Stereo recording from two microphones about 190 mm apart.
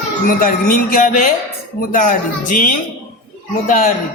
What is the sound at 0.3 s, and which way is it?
A man's voice, 50° left (ahead or behind).